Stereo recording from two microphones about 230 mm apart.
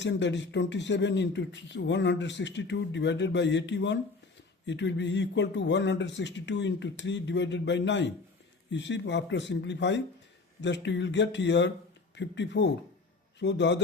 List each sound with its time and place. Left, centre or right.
0.0 s speech: left